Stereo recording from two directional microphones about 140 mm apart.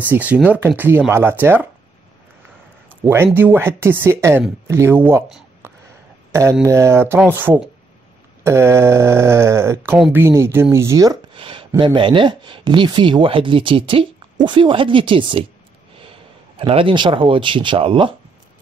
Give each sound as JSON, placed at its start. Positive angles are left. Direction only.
{"t": 0.0, "sound": "speech", "side_deg": -10}
{"t": 3.3, "sound": "speech", "side_deg": -15}
{"t": 5.6, "sound": "a sound", "side_deg": -15}
{"t": 6.6, "sound": "speech", "side_deg": -20}
{"t": 11.3, "sound": "a sound", "side_deg": -35}
{"t": 11.8, "sound": "speech", "side_deg": -35}
{"t": 16.5, "sound": "speech", "side_deg": -40}